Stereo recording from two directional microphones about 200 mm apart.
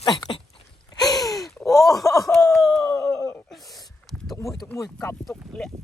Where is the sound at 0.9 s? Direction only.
20° left (ahead or behind).